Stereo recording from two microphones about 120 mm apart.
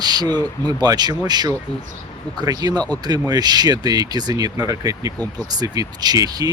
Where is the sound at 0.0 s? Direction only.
35° right (ahead or behind).